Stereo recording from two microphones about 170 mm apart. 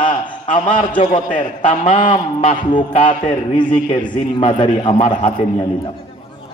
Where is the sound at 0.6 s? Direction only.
30° left (ahead or behind).